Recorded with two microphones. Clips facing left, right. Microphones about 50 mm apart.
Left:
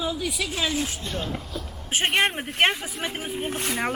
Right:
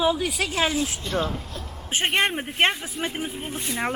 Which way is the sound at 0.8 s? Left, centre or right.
Centre.